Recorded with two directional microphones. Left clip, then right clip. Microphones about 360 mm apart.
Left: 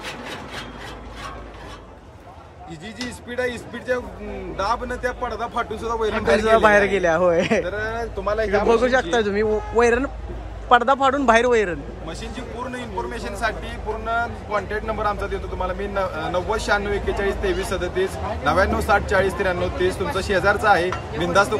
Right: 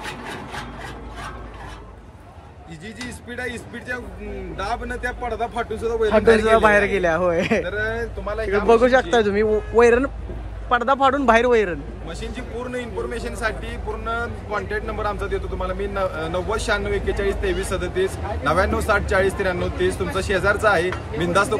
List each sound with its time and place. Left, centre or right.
3.3 s speech: centre
8.3 s speech: left
8.6 s speech: centre